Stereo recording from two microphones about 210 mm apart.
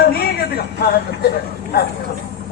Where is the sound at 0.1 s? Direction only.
45° left (ahead or behind).